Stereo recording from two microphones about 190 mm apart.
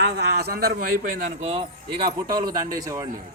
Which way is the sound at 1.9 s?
25° right (ahead or behind).